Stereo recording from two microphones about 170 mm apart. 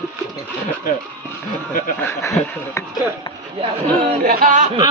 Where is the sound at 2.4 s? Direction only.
10° left (ahead or behind).